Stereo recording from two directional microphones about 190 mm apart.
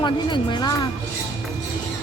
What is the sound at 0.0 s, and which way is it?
Speech, 25° left (ahead or behind).